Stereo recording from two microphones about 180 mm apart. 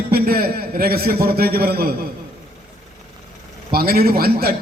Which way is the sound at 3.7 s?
55° right (ahead or behind).